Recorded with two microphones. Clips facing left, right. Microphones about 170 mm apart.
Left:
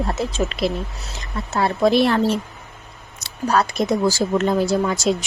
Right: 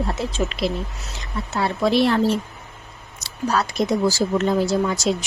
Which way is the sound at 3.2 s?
50° left (ahead or behind).